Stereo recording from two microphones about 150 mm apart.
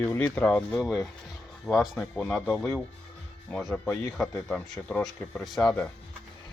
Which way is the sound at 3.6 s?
5° left (ahead or behind).